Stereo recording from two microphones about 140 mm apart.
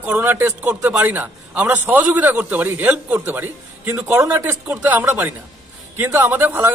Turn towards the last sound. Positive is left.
turn(degrees=-15)  # may be behind; listen again after turning